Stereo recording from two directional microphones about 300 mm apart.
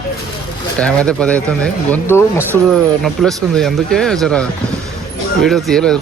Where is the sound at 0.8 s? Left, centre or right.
Centre.